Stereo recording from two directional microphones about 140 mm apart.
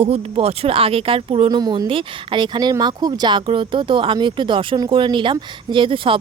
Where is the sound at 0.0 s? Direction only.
45° right (ahead or behind).